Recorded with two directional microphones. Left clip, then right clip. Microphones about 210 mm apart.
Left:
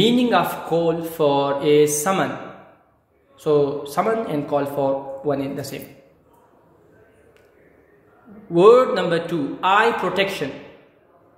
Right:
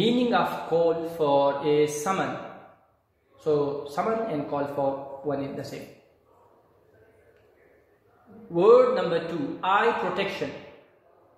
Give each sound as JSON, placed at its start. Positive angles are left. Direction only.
{"t": 0.0, "sound": "speech", "side_deg": 50}
{"t": 3.3, "sound": "speech", "side_deg": 50}
{"t": 8.5, "sound": "speech", "side_deg": 50}